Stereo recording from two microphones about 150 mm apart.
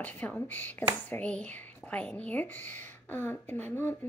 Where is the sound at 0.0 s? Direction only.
10° left (ahead or behind).